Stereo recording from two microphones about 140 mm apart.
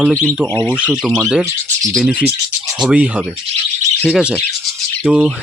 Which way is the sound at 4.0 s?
Centre (ahead or behind).